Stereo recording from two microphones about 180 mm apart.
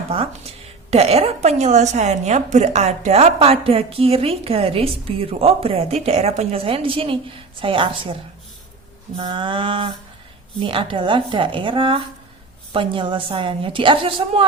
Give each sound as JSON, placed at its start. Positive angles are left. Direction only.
{"t": 0.9, "sound": "a woman's voice", "side_deg": -35}
{"t": 9.1, "sound": "a woman's voice", "side_deg": -25}